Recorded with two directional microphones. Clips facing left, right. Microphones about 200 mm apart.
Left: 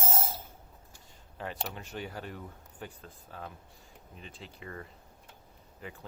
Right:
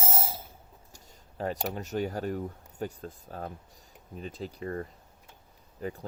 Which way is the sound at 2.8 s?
40° right (ahead or behind).